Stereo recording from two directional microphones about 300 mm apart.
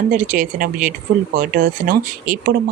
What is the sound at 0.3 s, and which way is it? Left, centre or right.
Speech, right.